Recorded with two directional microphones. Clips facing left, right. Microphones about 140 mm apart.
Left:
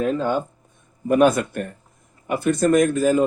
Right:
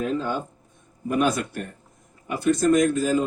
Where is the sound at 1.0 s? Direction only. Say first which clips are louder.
Left 6 dB; 55° left (ahead or behind).